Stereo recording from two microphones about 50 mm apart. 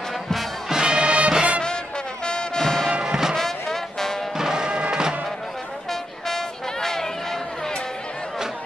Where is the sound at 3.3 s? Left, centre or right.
Centre.